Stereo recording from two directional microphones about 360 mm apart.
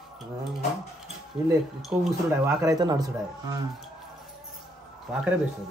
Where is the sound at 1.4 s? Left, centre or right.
Centre.